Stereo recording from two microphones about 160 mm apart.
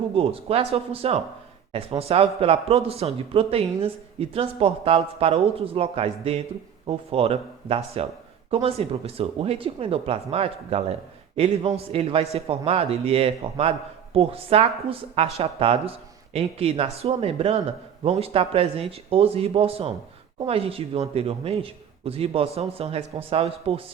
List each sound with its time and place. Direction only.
0.2 s a man's voice: 40° right (ahead or behind)